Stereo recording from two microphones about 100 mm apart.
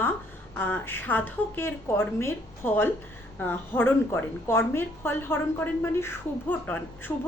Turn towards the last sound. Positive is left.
turn(degrees=20)  # may be behind; listen again after turning